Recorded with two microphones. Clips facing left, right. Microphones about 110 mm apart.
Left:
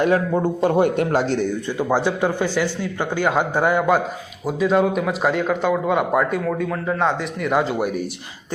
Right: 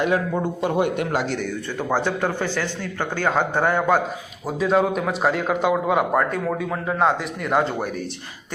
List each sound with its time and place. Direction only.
0.6 s a man's voice: 35° left (ahead or behind)
1.9 s a man's voice: 15° left (ahead or behind)